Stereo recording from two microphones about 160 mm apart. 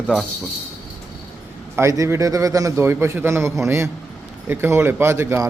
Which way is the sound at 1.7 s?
20° right (ahead or behind).